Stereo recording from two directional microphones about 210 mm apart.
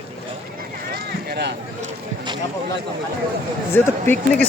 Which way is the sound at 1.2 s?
50° right (ahead or behind).